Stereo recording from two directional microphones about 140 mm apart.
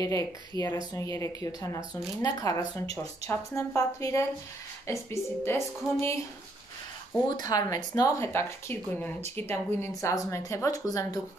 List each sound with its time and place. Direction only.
0.0 s speech: 25° left (ahead or behind)
7.2 s speech: 30° left (ahead or behind)